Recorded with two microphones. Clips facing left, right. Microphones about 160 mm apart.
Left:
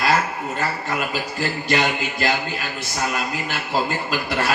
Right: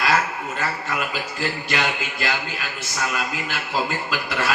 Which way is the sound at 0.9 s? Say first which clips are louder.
Left 2 dB; 40° left (ahead or behind).